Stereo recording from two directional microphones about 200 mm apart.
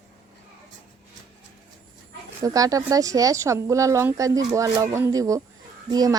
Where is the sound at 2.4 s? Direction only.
15° right (ahead or behind).